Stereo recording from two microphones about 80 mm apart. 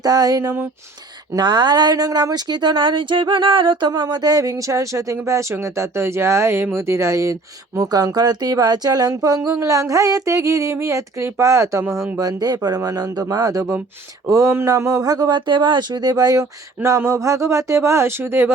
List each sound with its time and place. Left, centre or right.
0.0 s speech: right
1.4 s speech: right
7.8 s speech: right
9.5 s speech: right
12.2 s speech: right